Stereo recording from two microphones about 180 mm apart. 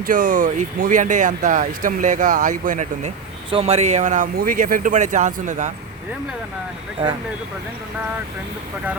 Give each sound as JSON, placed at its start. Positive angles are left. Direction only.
{"t": 0.0, "sound": "speech", "side_deg": -50}
{"t": 3.5, "sound": "speech", "side_deg": -35}